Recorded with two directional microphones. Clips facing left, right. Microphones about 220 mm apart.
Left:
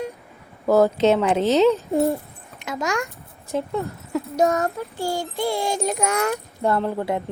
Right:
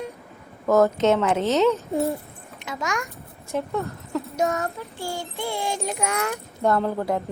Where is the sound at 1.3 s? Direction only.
30° left (ahead or behind).